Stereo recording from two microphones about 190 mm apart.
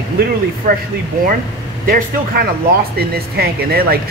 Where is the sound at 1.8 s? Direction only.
50° right (ahead or behind).